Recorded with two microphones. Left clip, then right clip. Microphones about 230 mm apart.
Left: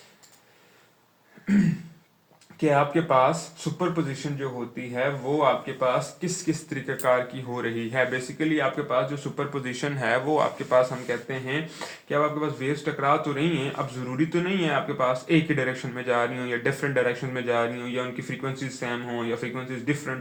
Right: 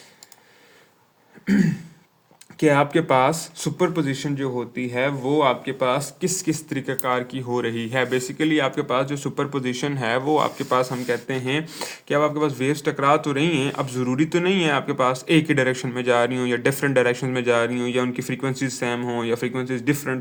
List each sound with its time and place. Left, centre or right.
2.6 s speech: right